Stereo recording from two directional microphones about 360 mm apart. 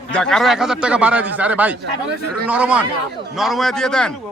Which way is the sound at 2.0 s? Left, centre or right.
Right.